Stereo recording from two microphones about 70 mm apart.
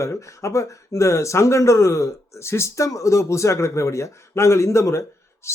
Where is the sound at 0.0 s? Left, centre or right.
Left.